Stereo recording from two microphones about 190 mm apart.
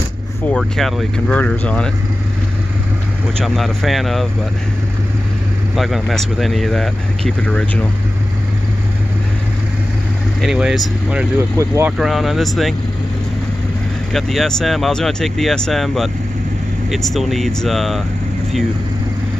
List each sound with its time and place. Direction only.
0.5 s speech: centre (ahead or behind)
3.3 s speech: centre (ahead or behind)
5.8 s speech: centre (ahead or behind)
10.4 s speech: centre (ahead or behind)
11.5 s speech: 15° right (ahead or behind)
12.0 s speech: centre (ahead or behind)
14.1 s speech: centre (ahead or behind)